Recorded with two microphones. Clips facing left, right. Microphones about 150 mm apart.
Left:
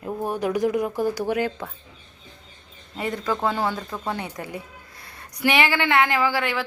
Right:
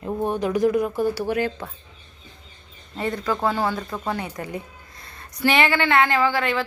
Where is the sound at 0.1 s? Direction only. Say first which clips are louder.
Right 2 dB; 5° left (ahead or behind).